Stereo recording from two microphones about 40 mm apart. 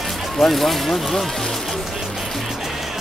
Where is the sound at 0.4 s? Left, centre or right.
Centre.